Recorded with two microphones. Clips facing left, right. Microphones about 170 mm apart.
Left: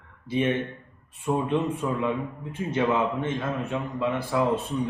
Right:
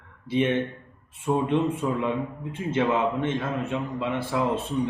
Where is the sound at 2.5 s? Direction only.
20° right (ahead or behind).